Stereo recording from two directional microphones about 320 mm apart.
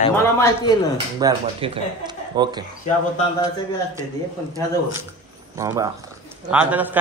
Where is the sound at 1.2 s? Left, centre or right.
Centre.